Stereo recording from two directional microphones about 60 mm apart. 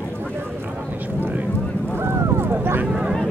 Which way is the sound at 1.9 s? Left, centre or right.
Right.